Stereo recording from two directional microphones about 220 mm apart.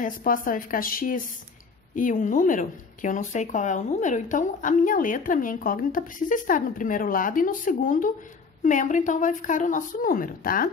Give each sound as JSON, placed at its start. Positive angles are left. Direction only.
{"t": 0.0, "sound": "speech", "side_deg": 40}